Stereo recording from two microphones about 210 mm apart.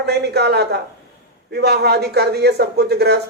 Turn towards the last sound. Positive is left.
turn(degrees=-50)  # may be behind; listen again after turning